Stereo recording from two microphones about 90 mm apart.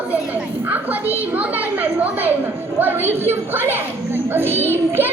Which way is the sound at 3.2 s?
25° right (ahead or behind).